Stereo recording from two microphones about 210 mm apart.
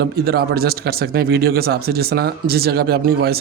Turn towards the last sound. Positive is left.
turn(degrees=-50)  # may be behind; listen again after turning